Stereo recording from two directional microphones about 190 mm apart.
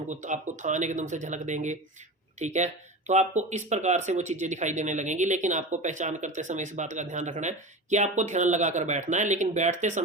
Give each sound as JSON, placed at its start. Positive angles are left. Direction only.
{"t": 0.1, "sound": "speech", "side_deg": -40}